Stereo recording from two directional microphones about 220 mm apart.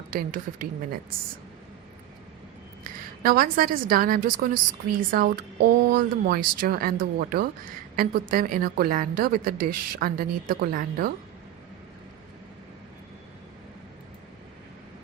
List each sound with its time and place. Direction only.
0.1 s speech: 40° right (ahead or behind)
2.8 s speech: 40° right (ahead or behind)